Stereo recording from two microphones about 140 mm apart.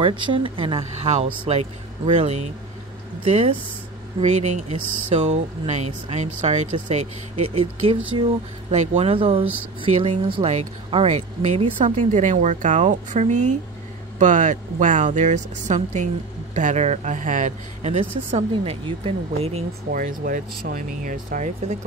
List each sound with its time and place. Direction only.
0.0 s speech: 35° right (ahead or behind)
2.1 s speech: 55° right (ahead or behind)
11.1 s speech: 55° right (ahead or behind)
18.6 s speech: 40° right (ahead or behind)
19.9 s speech: 75° right (ahead or behind)